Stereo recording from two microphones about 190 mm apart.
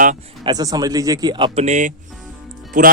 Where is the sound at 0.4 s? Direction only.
20° right (ahead or behind).